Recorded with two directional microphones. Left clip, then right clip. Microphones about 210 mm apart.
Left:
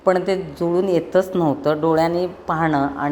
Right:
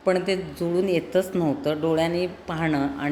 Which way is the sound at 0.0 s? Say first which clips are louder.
Left 5 dB; 5° left (ahead or behind).